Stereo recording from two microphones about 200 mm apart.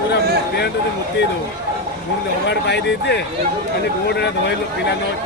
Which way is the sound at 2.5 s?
55° left (ahead or behind).